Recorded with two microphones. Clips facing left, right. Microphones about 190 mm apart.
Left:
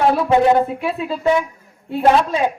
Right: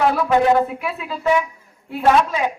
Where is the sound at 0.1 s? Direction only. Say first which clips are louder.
Left 2 dB; 25° left (ahead or behind).